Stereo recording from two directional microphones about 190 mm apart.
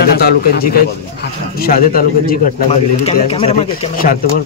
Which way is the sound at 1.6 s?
50° left (ahead or behind).